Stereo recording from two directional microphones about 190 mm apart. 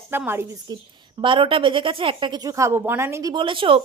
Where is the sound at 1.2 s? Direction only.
25° right (ahead or behind).